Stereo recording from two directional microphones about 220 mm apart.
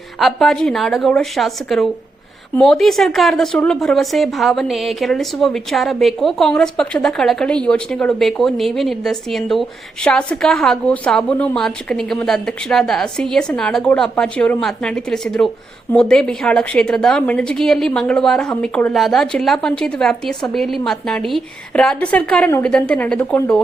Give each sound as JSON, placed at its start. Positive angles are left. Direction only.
{"t": 0.2, "sound": "speech", "side_deg": 0}